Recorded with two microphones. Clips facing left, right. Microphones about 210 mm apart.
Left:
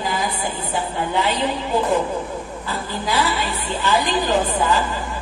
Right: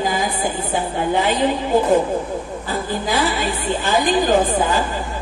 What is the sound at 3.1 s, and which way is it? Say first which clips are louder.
A woman's voice: right 1 dB; 50° right (ahead or behind).